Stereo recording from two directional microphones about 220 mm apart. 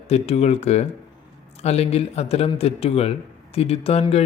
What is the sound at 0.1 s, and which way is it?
Speech, 30° left (ahead or behind).